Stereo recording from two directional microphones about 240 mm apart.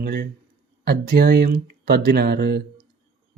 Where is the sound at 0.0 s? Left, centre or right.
Right.